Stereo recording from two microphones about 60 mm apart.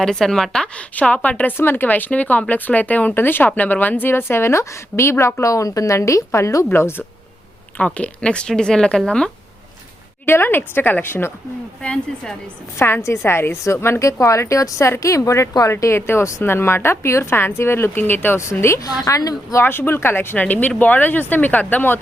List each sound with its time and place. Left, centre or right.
0.0 s speech: centre
0.8 s speech: centre
1.5 s speech: left
6.7 s speech: left
7.8 s speech: left
10.2 s speech: left
11.8 s speech: centre
12.8 s speech: left
18.3 s speech: left
18.8 s a woman's voice: left
19.6 s speech: left